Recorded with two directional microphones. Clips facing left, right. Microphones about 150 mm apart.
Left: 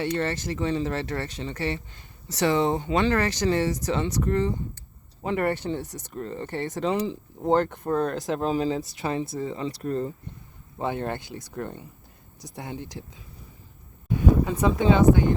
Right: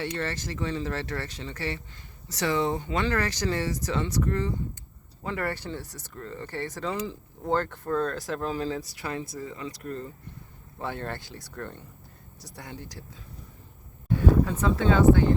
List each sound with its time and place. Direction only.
0.0 s speech: 20° left (ahead or behind)
10.8 s speech: 20° left (ahead or behind)
14.1 s a sound: 15° left (ahead or behind)
14.4 s speech: 15° left (ahead or behind)